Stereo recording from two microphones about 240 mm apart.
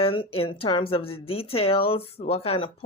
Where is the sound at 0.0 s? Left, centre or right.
Left.